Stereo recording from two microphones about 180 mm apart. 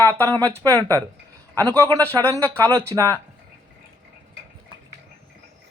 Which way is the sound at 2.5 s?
15° right (ahead or behind).